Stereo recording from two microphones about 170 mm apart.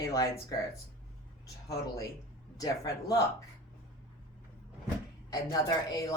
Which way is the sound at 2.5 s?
20° left (ahead or behind).